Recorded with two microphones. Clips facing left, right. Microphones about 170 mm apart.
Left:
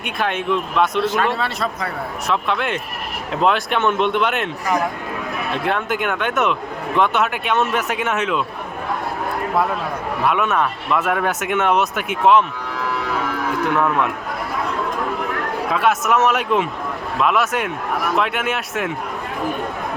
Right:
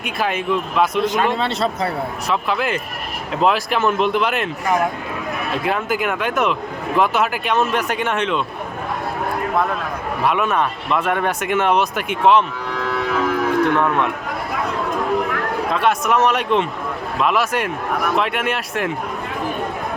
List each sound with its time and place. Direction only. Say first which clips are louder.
0.0 s speech: even; centre (ahead or behind)
1.0 s a man's voice: right 1 dB; 15° right (ahead or behind)
2.2 s speech: even; centre (ahead or behind)
5.6 s speech: right 1 dB; centre (ahead or behind)
10.2 s speech: even; centre (ahead or behind)
13.7 s speech: right 1 dB; centre (ahead or behind)
15.7 s speech: left 1 dB; 5° left (ahead or behind)